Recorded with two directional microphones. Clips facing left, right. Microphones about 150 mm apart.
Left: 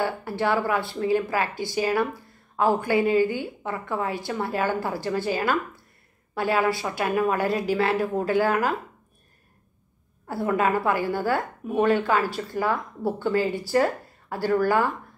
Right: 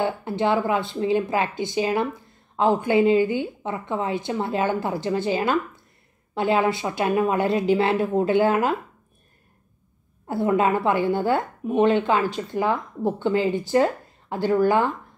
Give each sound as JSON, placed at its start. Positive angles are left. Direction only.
{"t": 0.0, "sound": "speech", "side_deg": -20}
{"t": 10.2, "sound": "speech", "side_deg": -20}